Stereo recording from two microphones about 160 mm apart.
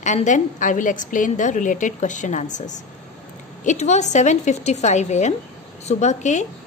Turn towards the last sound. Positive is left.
turn(degrees=45)  # may be behind; listen again after turning